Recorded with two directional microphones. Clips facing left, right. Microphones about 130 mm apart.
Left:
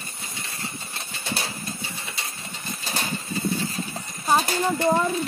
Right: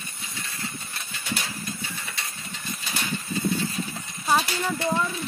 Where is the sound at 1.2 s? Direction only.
30° left (ahead or behind).